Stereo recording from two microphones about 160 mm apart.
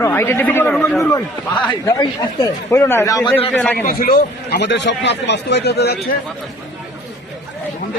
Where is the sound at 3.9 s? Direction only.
70° left (ahead or behind); by 6.2 s 85° left.